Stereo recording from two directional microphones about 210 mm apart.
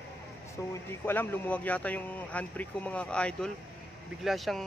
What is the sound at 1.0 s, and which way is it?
Speech, 10° left (ahead or behind).